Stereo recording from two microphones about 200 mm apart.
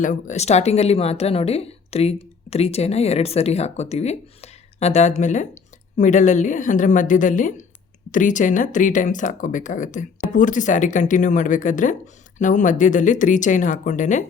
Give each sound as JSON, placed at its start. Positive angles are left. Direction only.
{"t": 0.0, "sound": "a woman's voice", "side_deg": 40}